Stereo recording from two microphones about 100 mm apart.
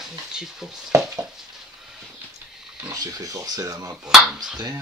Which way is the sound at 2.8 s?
40° right (ahead or behind).